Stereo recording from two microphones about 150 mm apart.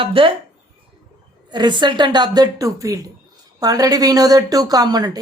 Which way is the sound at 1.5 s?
30° right (ahead or behind).